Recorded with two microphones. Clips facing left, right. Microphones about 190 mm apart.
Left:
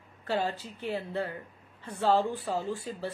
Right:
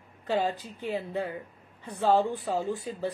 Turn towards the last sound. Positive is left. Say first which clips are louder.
# right 3 dB
turn(degrees=-20)  # may be behind; listen again after turning